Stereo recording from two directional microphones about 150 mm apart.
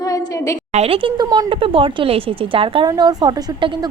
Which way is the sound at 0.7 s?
45° right (ahead or behind).